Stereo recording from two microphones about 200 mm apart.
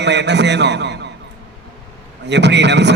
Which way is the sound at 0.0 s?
60° right (ahead or behind).